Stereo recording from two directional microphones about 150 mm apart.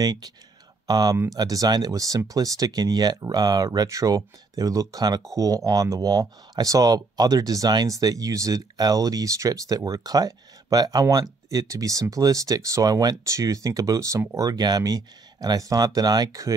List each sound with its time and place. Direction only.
0.0 s speech: 25° right (ahead or behind)